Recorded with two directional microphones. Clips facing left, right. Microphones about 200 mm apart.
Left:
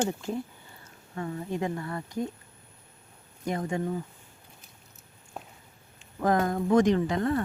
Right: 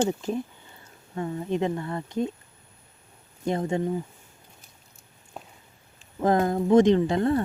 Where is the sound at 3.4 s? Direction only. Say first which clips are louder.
Right 4 dB; 25° right (ahead or behind).